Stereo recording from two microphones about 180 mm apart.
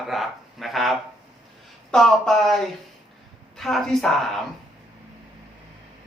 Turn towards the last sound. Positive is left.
turn(degrees=0)  # may be behind; listen again after turning